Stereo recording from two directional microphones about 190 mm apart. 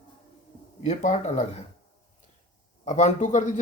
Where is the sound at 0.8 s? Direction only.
35° left (ahead or behind).